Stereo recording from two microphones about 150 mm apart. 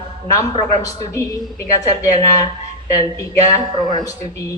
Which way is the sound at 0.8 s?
20° left (ahead or behind).